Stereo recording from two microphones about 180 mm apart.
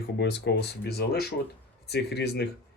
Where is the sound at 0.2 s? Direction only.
70° left (ahead or behind).